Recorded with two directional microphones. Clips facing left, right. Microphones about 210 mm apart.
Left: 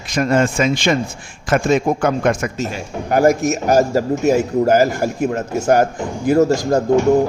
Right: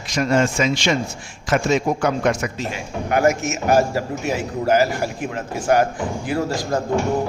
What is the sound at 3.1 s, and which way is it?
Speech, 35° left (ahead or behind).